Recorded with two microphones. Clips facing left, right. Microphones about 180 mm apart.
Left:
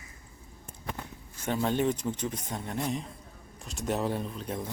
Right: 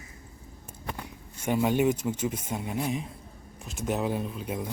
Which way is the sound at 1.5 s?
10° right (ahead or behind).